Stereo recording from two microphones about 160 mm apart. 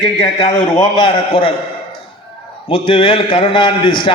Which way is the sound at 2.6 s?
35° left (ahead or behind).